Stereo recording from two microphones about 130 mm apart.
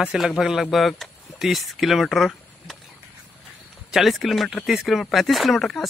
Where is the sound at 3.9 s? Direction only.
Centre (ahead or behind).